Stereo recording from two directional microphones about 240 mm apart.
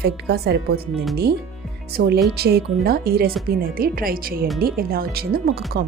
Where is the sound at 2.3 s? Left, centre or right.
Right.